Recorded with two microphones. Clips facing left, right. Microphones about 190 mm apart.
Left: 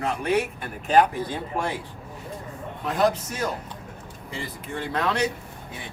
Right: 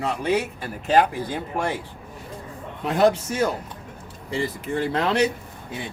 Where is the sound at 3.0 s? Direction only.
30° right (ahead or behind).